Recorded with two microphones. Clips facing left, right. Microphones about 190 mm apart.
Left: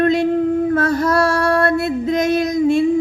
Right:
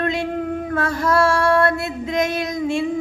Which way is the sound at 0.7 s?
40° left (ahead or behind).